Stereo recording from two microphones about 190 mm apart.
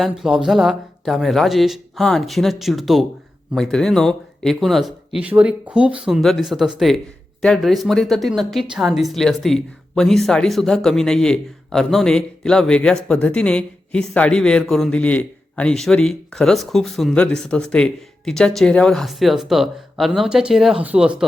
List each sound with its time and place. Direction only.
0.0 s speech: centre (ahead or behind)